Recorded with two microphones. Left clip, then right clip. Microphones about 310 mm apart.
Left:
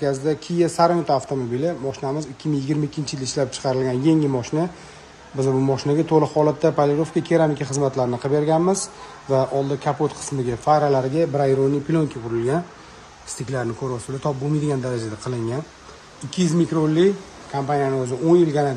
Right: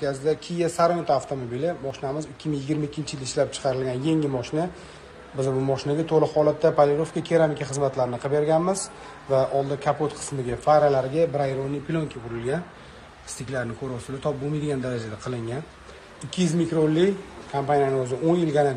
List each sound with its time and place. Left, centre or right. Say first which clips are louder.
0.0 s a man's voice: left 3 dB; left